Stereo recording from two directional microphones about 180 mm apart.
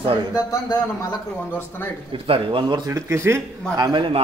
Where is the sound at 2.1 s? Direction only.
30° right (ahead or behind).